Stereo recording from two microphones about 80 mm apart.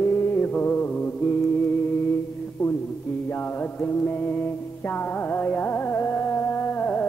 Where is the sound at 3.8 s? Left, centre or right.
Left.